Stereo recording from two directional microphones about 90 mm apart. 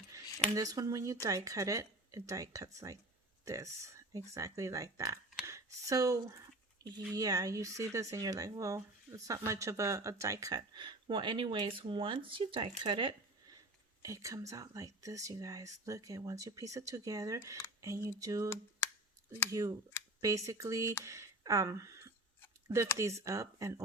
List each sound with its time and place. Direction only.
0.5 s speech: 40° right (ahead or behind)
10.6 s speech: 60° right (ahead or behind)
14.0 s speech: 35° right (ahead or behind)
18.4 s speech: 30° left (ahead or behind)
19.5 s speech: 40° right (ahead or behind)